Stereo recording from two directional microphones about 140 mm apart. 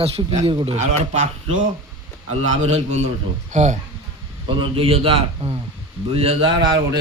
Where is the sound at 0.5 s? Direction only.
40° right (ahead or behind).